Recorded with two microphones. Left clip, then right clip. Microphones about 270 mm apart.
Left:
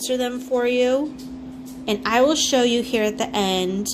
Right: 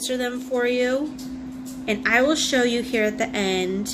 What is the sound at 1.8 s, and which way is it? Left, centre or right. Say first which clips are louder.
Speech: even; left.